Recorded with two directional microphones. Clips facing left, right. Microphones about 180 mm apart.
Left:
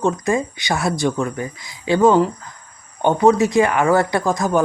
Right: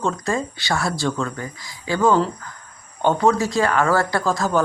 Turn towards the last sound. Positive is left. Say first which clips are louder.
# left 2 dB
turn(degrees=15)  # may be behind; listen again after turning